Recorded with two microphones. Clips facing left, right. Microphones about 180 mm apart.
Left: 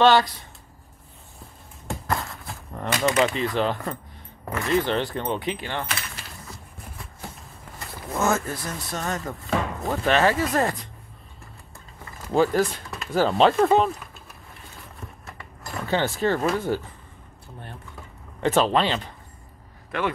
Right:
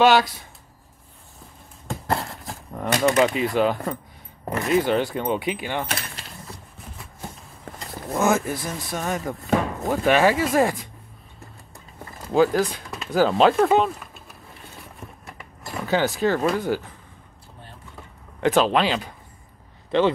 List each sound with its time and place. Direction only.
0.0 s speech: 10° right (ahead or behind)
2.0 s a sound: 30° right (ahead or behind)
3.0 s speech: 15° right (ahead or behind)
4.5 s speech: 25° right (ahead or behind)
4.7 s speech: 10° right (ahead or behind)
8.1 s speech: 10° right (ahead or behind)
12.3 s speech: centre (ahead or behind)
15.2 s a sound: 15° right (ahead or behind)
15.9 s speech: centre (ahead or behind)
18.4 s speech: centre (ahead or behind)